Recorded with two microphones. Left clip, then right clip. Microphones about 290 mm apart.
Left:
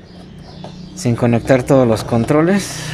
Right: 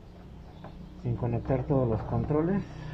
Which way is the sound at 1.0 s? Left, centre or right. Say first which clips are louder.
Left 18 dB; left.